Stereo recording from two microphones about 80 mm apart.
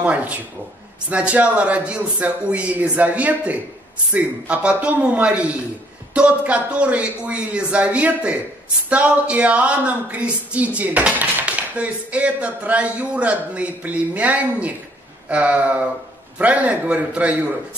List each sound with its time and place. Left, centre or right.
0.0 s a woman's voice: centre